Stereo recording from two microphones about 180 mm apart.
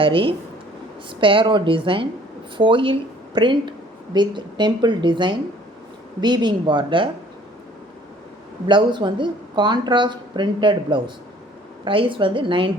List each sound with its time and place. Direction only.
0.0 s a woman's voice: 30° right (ahead or behind)
8.6 s speech: 25° right (ahead or behind)